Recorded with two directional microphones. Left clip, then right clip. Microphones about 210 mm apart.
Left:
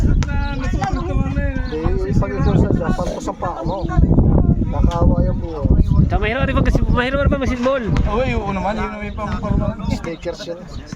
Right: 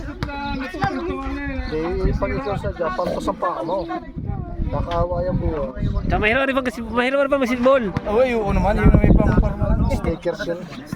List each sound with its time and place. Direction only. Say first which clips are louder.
6.1 s speech: right 3 dB; 5° right (ahead or behind)
8.1 s speech: right 4 dB; 45° right (ahead or behind)